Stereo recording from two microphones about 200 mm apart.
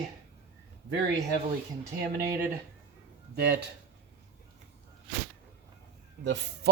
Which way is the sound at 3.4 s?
55° right (ahead or behind).